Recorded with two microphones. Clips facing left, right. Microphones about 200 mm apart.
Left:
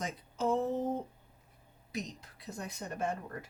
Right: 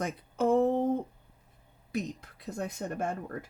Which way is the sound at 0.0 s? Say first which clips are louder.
Right 5 dB; 60° right (ahead or behind).